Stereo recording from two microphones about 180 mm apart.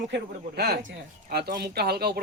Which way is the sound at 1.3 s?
60° right (ahead or behind).